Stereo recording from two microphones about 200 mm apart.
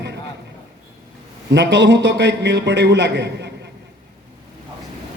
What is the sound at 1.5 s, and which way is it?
Speech, 60° right (ahead or behind).